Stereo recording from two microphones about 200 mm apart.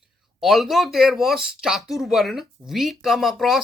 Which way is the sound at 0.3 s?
Centre (ahead or behind).